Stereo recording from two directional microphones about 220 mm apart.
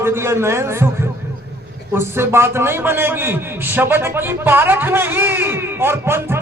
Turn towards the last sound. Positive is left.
turn(degrees=-10)  # may be behind; listen again after turning